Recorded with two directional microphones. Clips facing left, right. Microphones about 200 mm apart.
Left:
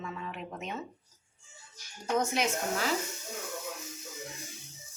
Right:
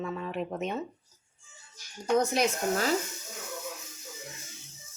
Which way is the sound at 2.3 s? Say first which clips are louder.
Right 4 dB; 40° right (ahead or behind).